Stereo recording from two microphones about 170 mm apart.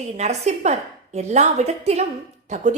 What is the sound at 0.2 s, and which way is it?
A woman's voice, 40° right (ahead or behind).